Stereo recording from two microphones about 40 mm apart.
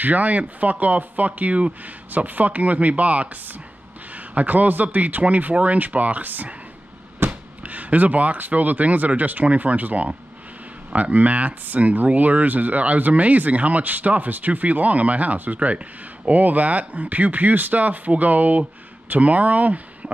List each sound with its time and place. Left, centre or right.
0.0 s speech: right